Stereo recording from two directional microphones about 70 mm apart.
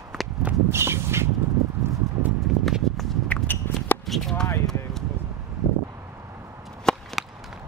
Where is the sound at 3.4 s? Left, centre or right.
Left.